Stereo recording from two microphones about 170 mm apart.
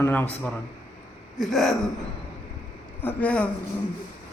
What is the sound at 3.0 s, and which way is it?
Speech, 5° left (ahead or behind).